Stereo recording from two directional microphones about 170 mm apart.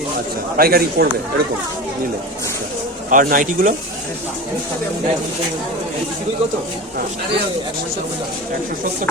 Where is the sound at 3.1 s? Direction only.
55° right (ahead or behind).